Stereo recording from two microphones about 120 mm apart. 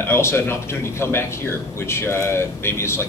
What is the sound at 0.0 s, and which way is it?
Speech, 20° left (ahead or behind).